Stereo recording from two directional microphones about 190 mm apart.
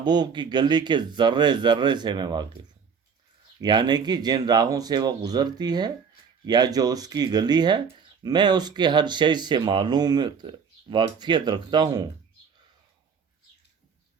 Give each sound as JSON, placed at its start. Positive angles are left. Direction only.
{"t": 0.0, "sound": "speech", "side_deg": -20}
{"t": 3.6, "sound": "speech", "side_deg": -25}